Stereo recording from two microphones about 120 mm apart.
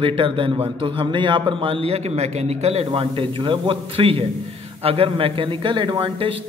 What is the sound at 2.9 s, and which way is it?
Speech, 45° right (ahead or behind).